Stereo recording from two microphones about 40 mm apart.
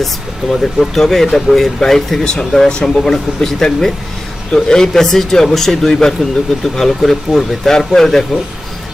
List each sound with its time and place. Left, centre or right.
0.6 s speech: centre